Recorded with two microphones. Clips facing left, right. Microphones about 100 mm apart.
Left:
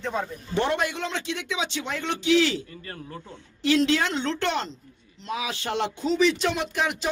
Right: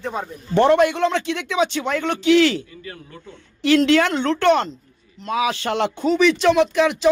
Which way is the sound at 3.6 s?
70° right (ahead or behind).